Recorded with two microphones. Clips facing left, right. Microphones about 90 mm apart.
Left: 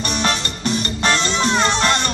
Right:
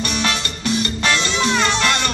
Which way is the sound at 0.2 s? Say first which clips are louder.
Left 1 dB; 35° left (ahead or behind).